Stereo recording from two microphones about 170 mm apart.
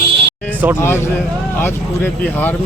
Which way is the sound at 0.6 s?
10° right (ahead or behind).